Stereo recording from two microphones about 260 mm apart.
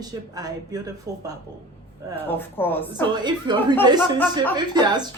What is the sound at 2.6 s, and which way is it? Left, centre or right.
Speech, centre.